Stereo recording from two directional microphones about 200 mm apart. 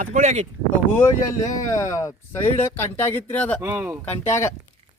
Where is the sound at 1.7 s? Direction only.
15° left (ahead or behind).